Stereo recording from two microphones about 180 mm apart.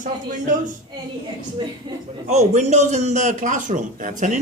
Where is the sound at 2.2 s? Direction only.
40° right (ahead or behind).